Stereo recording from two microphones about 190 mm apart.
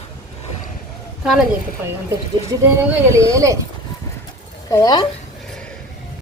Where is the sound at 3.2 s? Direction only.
15° right (ahead or behind).